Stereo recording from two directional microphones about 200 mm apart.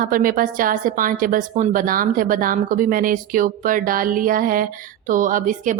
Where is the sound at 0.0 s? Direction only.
45° right (ahead or behind).